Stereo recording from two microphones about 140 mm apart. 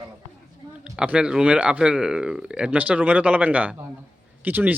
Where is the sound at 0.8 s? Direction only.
5° right (ahead or behind).